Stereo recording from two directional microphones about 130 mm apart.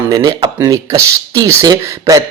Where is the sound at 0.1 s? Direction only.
30° right (ahead or behind).